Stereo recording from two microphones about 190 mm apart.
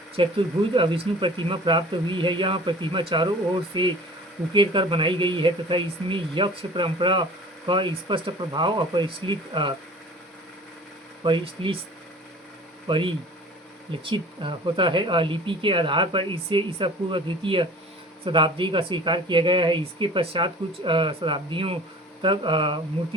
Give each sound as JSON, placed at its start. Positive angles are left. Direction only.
{"t": 0.2, "sound": "speech", "side_deg": -25}
{"t": 11.2, "sound": "speech", "side_deg": -25}
{"t": 12.9, "sound": "speech", "side_deg": -25}